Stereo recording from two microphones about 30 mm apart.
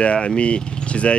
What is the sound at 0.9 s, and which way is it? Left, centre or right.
Speech, left.